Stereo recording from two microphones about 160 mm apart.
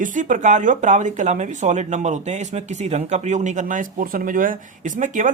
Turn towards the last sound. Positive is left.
turn(degrees=-50)  # may be behind; listen again after turning